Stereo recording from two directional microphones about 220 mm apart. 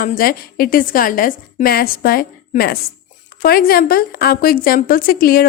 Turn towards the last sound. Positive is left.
turn(degrees=40)  # may be behind; listen again after turning